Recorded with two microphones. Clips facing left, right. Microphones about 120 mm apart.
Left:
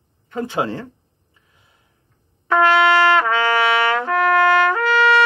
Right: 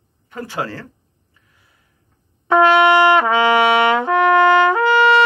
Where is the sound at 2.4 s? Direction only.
20° right (ahead or behind).